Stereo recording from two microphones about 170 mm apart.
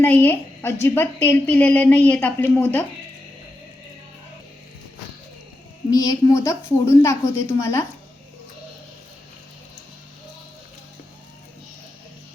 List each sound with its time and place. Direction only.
0.0 s a woman's voice: 10° left (ahead or behind)
5.9 s a woman's voice: 20° left (ahead or behind)